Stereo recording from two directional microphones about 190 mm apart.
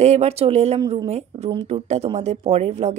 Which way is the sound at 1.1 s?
35° right (ahead or behind).